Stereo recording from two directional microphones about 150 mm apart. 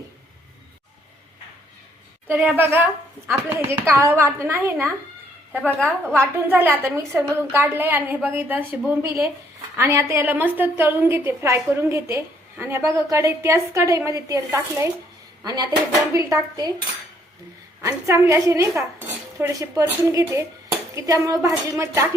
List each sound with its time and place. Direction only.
2.6 s a woman's voice: 15° right (ahead or behind)
5.5 s a woman's voice: 10° left (ahead or behind)
6.1 s a woman's voice: 15° right (ahead or behind)
17.8 s a woman's voice: 20° right (ahead or behind)